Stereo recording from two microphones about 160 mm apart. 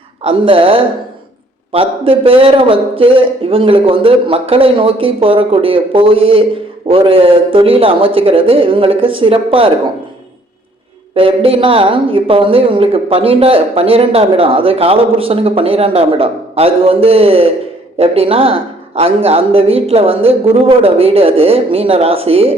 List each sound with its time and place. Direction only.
0.2 s a woman's voice: 35° right (ahead or behind)
11.1 s a woman's voice: 35° right (ahead or behind)